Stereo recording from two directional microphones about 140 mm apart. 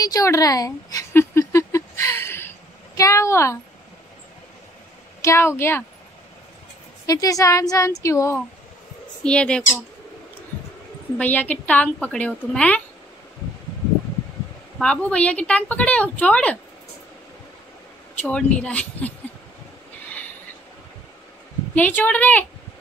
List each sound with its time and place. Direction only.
0.0 s a sound: 25° left (ahead or behind)
3.0 s a woman's voice: 20° left (ahead or behind)
5.2 s a woman's voice: 20° left (ahead or behind)
7.1 s a woman's voice: 25° left (ahead or behind)
9.2 s a woman's voice: 5° left (ahead or behind)
11.1 s a woman's voice: 10° left (ahead or behind)
14.8 s a woman's voice: 5° left (ahead or behind)
18.1 s a woman's voice: 10° left (ahead or behind)
21.7 s a woman's voice: 10° left (ahead or behind)